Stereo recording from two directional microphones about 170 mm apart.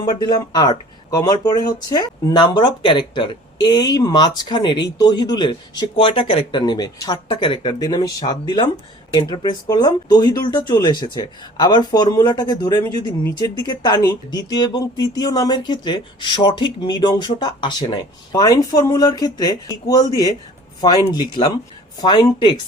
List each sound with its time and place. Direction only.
0.0 s speech: 25° left (ahead or behind)